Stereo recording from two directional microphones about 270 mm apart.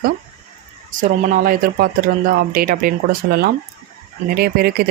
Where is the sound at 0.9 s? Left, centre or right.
Right.